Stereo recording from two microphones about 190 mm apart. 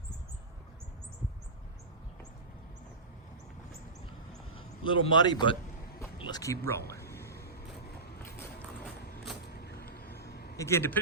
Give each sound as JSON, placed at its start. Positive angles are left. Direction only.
{"t": 4.5, "sound": "speech", "side_deg": 25}
{"t": 6.9, "sound": "music", "side_deg": 15}
{"t": 9.5, "sound": "a sound", "side_deg": 55}
{"t": 10.6, "sound": "speech", "side_deg": 15}